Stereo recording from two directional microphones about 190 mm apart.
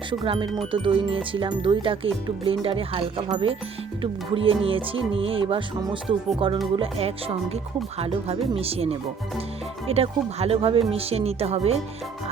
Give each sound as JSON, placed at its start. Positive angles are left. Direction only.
{"t": 0.1, "sound": "speech", "side_deg": -25}